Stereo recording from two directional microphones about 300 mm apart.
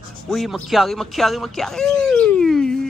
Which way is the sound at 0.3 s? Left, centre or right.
Centre.